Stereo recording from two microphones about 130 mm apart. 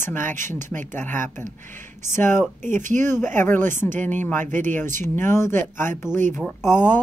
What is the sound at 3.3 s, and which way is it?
Speech, 15° left (ahead or behind).